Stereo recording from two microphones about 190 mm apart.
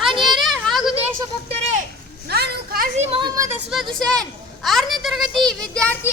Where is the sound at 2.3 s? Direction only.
55° right (ahead or behind).